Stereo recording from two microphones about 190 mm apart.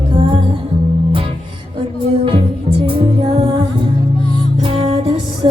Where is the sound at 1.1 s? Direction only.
30° right (ahead or behind).